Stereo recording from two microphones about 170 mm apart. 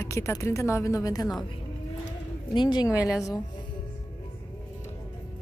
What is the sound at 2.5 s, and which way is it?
Speech, 25° left (ahead or behind).